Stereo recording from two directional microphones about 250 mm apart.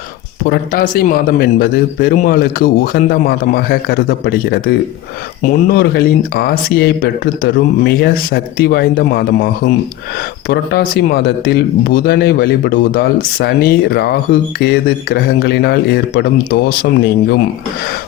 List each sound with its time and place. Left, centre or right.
0.4 s speech: left